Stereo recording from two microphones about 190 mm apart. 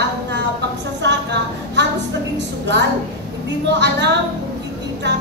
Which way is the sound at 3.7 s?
65° right (ahead or behind).